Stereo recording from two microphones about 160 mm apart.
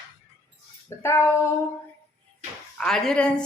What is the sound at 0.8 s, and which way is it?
Speech, 15° left (ahead or behind).